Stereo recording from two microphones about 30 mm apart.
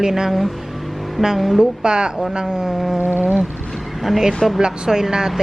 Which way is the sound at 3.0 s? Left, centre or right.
Right.